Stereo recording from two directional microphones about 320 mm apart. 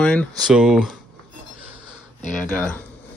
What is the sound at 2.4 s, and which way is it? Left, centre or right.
Speech, centre.